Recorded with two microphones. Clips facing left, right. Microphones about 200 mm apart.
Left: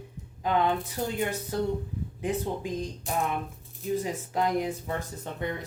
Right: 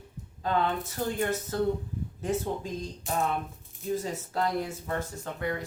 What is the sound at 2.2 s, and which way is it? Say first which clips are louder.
Speech: even; 15° left (ahead or behind).